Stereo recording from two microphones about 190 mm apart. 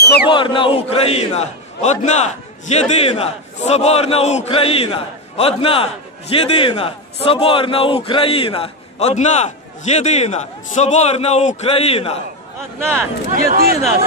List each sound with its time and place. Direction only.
0.0 s a sound: 60° left (ahead or behind)
0.3 s a man's voice: 25° left (ahead or behind)
13.3 s speech: 50° right (ahead or behind)